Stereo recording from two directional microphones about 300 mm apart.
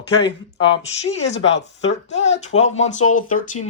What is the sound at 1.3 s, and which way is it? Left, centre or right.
Speech, left.